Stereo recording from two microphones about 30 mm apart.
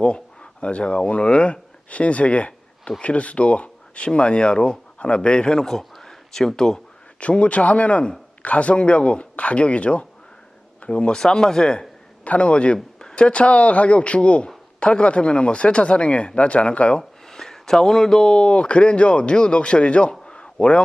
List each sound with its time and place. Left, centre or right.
0.6 s speech: left
4.1 s speech: left
5.6 s speech: centre
7.3 s speech: left
9.3 s a sound: left
9.6 s speech: left
10.8 s speech: left
11.2 s speech: centre
12.2 s speech: left
17.0 s speech: centre; by 20.1 s left
20.2 s a sound: left